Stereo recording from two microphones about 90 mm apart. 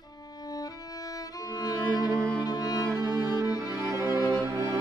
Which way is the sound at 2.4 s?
50° left (ahead or behind).